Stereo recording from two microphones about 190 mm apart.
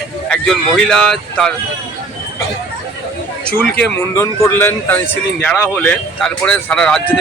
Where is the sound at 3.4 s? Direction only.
5° left (ahead or behind).